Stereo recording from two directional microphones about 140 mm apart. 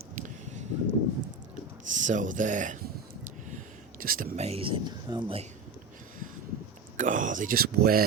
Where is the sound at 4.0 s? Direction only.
90° right.